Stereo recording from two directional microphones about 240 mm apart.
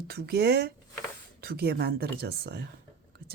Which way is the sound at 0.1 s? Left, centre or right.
Right.